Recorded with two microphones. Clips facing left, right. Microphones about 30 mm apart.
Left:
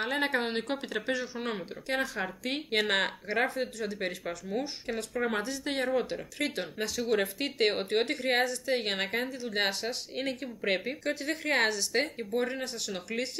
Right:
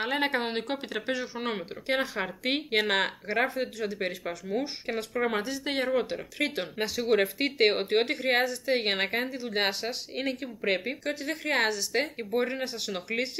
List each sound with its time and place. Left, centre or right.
0.0 s speech: centre
12.2 s speech: centre